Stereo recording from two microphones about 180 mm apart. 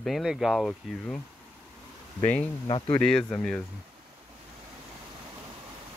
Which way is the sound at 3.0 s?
5° left (ahead or behind).